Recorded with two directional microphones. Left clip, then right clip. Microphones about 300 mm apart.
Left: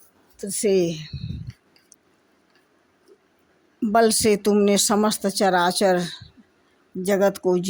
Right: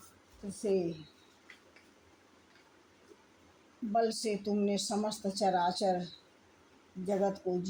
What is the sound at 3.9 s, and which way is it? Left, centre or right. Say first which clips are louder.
Speech: left 14 dB; left.